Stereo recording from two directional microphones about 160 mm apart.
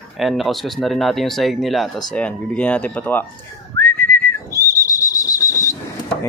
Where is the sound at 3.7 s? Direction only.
15° left (ahead or behind).